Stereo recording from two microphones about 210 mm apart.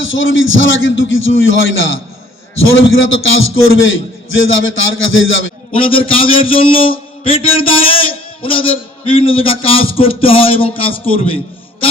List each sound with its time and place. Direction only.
0.0 s a man's voice: 65° left (ahead or behind)
5.7 s a man's voice: 25° left (ahead or behind)